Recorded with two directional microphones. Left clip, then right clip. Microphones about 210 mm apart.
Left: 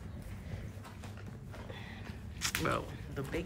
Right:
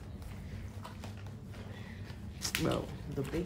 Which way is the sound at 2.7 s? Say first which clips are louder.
Even; 20° right (ahead or behind).